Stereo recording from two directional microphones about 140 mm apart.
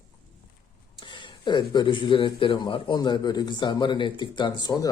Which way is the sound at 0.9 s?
35° left (ahead or behind).